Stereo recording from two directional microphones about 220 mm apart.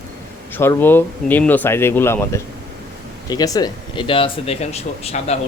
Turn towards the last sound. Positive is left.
turn(degrees=30)  # may be behind; listen again after turning